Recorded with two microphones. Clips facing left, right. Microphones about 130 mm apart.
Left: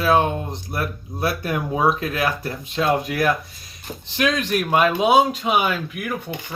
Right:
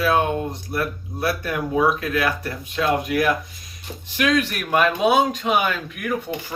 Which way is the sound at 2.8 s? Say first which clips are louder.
Left 1 dB; 30° left (ahead or behind).